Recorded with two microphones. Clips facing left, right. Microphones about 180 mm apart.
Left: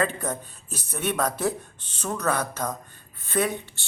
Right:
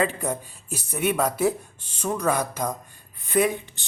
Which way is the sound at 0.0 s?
10° right (ahead or behind).